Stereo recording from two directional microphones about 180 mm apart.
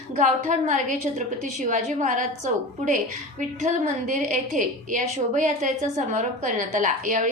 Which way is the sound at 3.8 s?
45° right (ahead or behind).